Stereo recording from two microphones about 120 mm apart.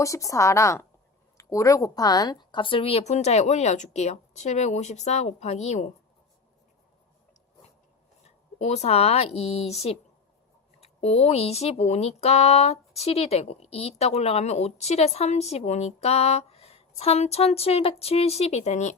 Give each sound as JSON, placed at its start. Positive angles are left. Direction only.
{"t": 0.0, "sound": "a woman's voice", "side_deg": 25}
{"t": 8.5, "sound": "speech", "side_deg": 70}